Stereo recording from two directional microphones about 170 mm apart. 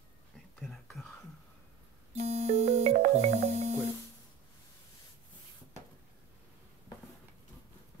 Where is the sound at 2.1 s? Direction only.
40° right (ahead or behind).